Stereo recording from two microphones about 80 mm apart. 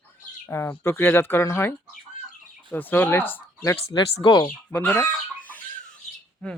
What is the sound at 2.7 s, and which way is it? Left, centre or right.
Speech, left.